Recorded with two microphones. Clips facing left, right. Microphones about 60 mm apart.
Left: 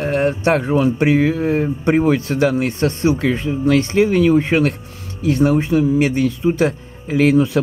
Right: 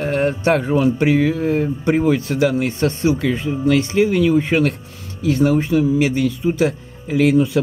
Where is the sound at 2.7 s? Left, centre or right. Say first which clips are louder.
Left 1 dB; centre.